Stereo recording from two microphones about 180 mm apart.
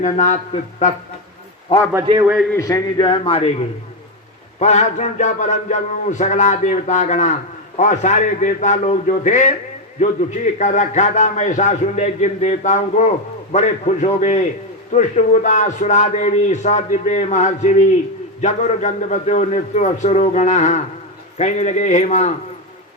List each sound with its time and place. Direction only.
0.0 s speech: 40° left (ahead or behind)
2.2 s a man's voice: 5° right (ahead or behind)
2.5 s a man's voice: 15° left (ahead or behind)
4.6 s a man's voice: 40° left (ahead or behind)